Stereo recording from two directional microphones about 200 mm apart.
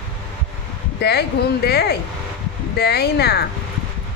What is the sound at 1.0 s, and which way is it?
Speech, 55° left (ahead or behind).